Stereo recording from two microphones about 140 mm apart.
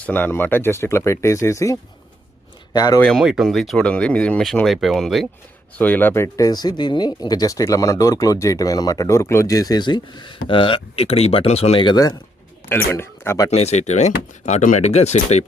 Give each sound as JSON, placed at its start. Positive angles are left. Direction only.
{"t": 0.0, "sound": "speech", "side_deg": 10}
{"t": 3.0, "sound": "speech", "side_deg": 0}
{"t": 5.7, "sound": "speech", "side_deg": 15}
{"t": 12.6, "sound": "speech", "side_deg": 15}
{"t": 13.5, "sound": "speech", "side_deg": 50}